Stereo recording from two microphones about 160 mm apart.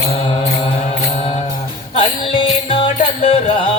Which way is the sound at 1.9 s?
35° left (ahead or behind).